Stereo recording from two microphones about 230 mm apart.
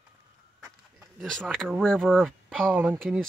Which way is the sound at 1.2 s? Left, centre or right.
Centre.